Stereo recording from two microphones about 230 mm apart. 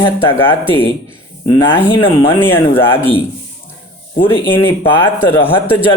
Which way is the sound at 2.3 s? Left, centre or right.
Centre.